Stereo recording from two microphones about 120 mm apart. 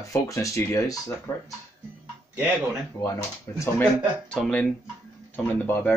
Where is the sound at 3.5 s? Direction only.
25° left (ahead or behind).